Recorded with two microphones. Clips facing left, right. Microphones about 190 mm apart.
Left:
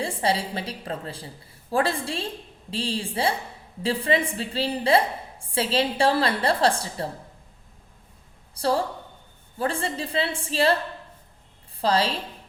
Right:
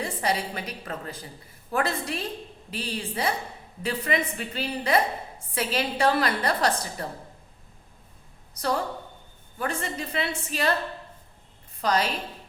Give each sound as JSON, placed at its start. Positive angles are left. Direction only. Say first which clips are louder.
{"t": 0.0, "sound": "a woman's voice", "louder": "left 2 dB", "side_deg": 30}
{"t": 8.5, "sound": "a woman's voice", "louder": "left 3 dB", "side_deg": 30}
{"t": 11.8, "sound": "a woman's voice", "louder": "left 2 dB", "side_deg": 30}